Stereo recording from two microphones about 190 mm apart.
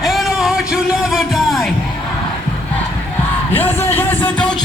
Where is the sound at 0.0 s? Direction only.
Centre (ahead or behind).